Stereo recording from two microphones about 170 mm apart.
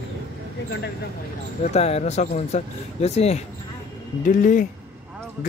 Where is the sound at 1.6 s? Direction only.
40° left (ahead or behind).